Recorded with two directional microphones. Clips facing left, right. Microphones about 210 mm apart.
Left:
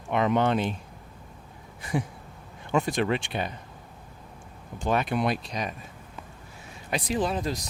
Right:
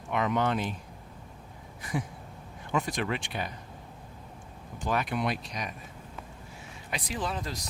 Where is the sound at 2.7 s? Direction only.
30° left (ahead or behind).